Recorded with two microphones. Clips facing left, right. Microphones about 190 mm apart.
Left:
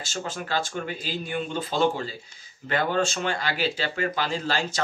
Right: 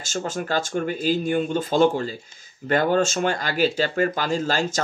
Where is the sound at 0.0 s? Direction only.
45° right (ahead or behind).